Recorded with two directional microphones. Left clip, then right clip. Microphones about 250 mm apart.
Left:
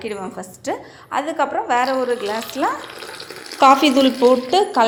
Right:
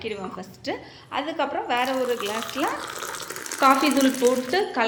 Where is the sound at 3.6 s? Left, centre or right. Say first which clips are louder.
Left 7 dB; left.